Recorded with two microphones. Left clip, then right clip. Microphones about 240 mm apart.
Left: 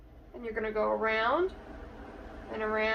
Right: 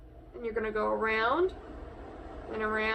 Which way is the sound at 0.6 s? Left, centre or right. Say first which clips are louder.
Left 1 dB; centre.